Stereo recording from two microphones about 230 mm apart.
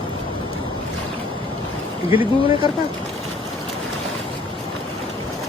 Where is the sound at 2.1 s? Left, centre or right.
Left.